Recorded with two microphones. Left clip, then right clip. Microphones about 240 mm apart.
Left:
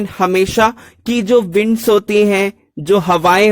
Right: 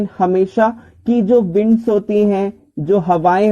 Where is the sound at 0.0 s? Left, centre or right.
Left.